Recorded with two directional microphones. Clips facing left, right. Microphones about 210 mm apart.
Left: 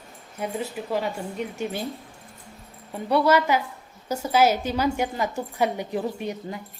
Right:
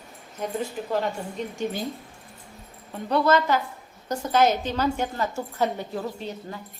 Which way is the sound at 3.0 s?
10° left (ahead or behind).